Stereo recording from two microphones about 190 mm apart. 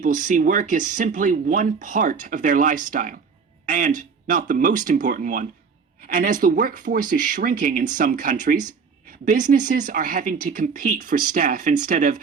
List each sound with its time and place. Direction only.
0.0 s speech: 40° right (ahead or behind)